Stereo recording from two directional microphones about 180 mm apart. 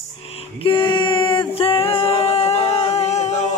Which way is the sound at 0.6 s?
25° left (ahead or behind).